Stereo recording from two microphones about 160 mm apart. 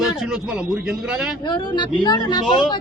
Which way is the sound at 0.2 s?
5° right (ahead or behind).